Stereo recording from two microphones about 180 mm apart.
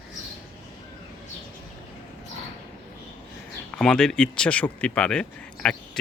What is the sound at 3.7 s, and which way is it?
Speech, 5° left (ahead or behind).